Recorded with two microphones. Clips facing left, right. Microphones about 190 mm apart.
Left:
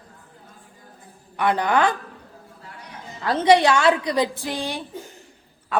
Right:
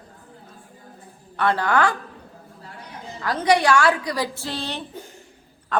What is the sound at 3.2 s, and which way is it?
A man's voice, 25° left (ahead or behind).